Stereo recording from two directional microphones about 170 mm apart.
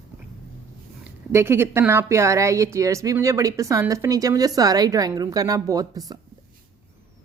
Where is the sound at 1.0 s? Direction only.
15° right (ahead or behind).